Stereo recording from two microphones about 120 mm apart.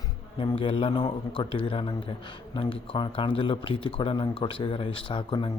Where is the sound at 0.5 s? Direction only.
50° left (ahead or behind).